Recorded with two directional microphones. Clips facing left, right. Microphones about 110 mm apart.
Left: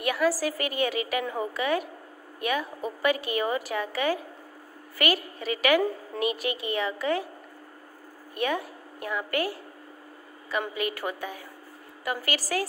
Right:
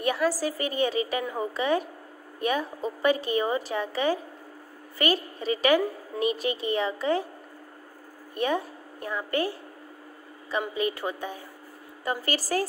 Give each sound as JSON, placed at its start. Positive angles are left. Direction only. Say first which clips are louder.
{"t": 0.0, "sound": "a woman's voice", "louder": "even", "side_deg": -30}
{"t": 8.4, "sound": "a woman's voice", "louder": "right 2 dB", "side_deg": -30}
{"t": 10.7, "sound": "a woman's voice", "louder": "right 2 dB", "side_deg": -25}